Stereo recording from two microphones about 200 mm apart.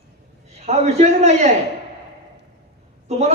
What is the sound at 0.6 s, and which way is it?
Speech, 35° right (ahead or behind).